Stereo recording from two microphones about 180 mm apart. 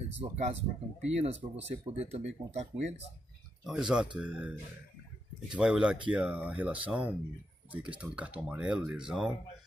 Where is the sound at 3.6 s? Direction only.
5° right (ahead or behind).